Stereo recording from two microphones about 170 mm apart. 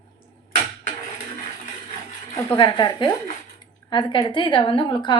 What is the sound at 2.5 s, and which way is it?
A woman's voice, 25° left (ahead or behind).